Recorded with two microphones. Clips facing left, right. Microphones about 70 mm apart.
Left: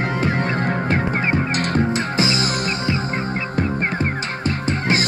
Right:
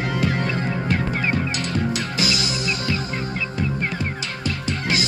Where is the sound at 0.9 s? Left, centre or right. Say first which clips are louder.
Left 1 dB; left.